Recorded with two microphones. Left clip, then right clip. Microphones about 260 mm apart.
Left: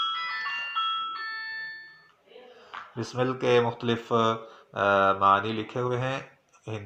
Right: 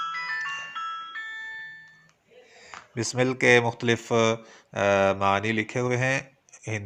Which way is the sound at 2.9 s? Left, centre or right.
Right.